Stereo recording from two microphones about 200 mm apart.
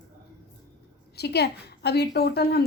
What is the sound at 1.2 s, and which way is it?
A woman's voice, 55° left (ahead or behind).